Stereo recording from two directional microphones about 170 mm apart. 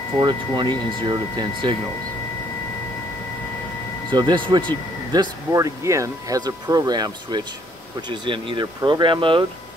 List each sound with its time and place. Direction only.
0.2 s speech: 25° right (ahead or behind)
4.1 s speech: 25° right (ahead or behind)